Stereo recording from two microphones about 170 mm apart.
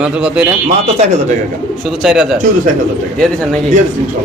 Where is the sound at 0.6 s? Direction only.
45° right (ahead or behind).